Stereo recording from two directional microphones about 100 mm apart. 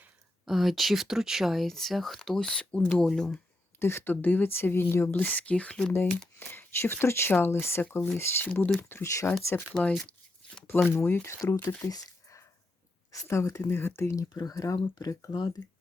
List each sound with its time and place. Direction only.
0.4 s speech: centre (ahead or behind)
3.8 s speech: 25° left (ahead or behind)
6.4 s speech: 20° left (ahead or behind)
8.9 s speech: 30° left (ahead or behind)
9.9 s tearing: 5° left (ahead or behind)
10.9 s speech: 25° left (ahead or behind)
11.3 s speech: 35° left (ahead or behind)
11.6 s speech: 20° left (ahead or behind)
11.9 s a sound: 40° left (ahead or behind)
13.1 s speech: 30° left (ahead or behind)
14.3 s speech: 40° left (ahead or behind)